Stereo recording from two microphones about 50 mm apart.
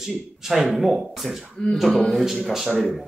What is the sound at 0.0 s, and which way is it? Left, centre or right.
Speech, centre.